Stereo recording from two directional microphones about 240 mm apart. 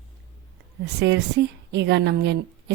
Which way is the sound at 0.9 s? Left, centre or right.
Right.